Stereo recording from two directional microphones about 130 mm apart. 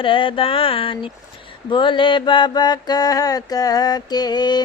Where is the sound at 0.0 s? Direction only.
40° left (ahead or behind).